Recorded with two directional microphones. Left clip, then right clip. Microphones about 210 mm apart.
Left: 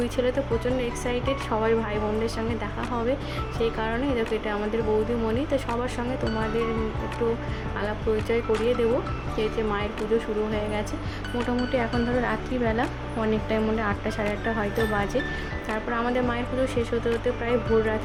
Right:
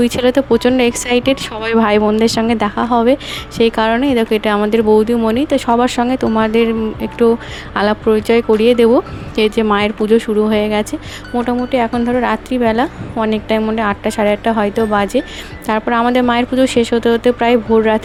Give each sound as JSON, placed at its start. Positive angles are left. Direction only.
{"t": 0.0, "sound": "speech", "side_deg": -45}
{"t": 7.8, "sound": "speech", "side_deg": -45}